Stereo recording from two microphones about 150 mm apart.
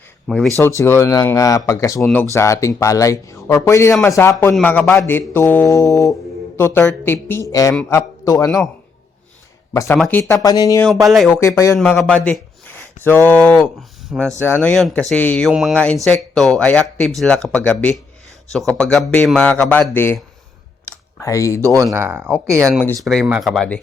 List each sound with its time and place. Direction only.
0.3 s speech: centre (ahead or behind)
0.8 s a man's voice: 20° left (ahead or behind)
9.7 s a man's voice: 20° left (ahead or behind)
10.4 s speech: 25° left (ahead or behind)
10.8 s speech: centre (ahead or behind)
11.3 s speech: 20° left (ahead or behind)
11.8 s speech: 5° left (ahead or behind)
13.6 s speech: 5° right (ahead or behind)
14.4 s a man's voice: 10° left (ahead or behind)
21.2 s speech: 20° left (ahead or behind)
21.6 s speech: 20° right (ahead or behind)
23.0 s speech: centre (ahead or behind)